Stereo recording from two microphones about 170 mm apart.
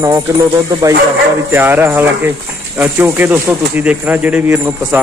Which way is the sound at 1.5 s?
10° right (ahead or behind).